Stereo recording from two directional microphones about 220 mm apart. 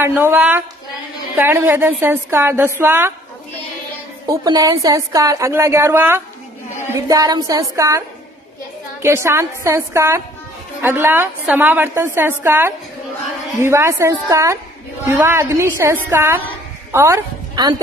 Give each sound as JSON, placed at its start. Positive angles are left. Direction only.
{"t": 0.0, "sound": "speech", "side_deg": -10}
{"t": 4.3, "sound": "speech", "side_deg": -15}
{"t": 9.0, "sound": "a woman's voice", "side_deg": -10}